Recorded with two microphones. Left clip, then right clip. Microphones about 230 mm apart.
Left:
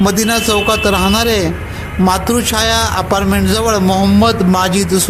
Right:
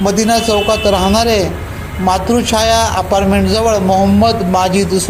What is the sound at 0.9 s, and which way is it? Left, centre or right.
Speech, left.